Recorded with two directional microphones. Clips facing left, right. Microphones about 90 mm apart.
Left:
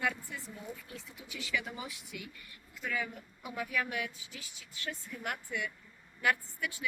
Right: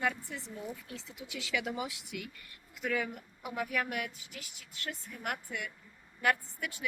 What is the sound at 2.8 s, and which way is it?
A woman's voice, 50° right (ahead or behind).